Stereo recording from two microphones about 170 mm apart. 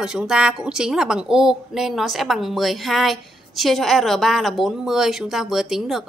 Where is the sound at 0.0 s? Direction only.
5° right (ahead or behind).